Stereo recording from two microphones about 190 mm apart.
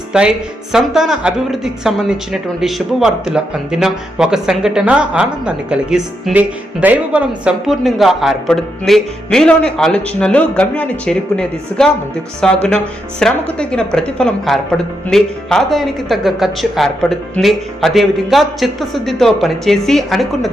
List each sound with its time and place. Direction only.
0.1 s speech: 5° right (ahead or behind)